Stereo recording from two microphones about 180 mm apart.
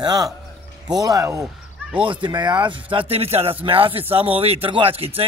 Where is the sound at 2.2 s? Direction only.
25° right (ahead or behind).